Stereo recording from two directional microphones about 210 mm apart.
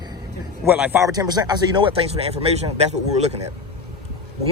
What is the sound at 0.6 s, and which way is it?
A man's voice, 10° right (ahead or behind).